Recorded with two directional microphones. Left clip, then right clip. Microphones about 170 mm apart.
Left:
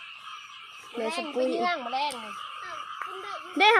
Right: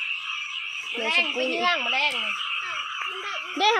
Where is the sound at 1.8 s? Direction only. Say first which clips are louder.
Right 6 dB; 30° right (ahead or behind).